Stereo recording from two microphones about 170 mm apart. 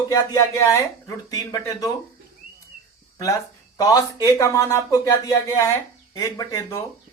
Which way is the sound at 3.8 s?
20° left (ahead or behind).